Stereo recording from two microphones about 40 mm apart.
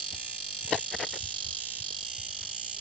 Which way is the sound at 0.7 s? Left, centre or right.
Centre.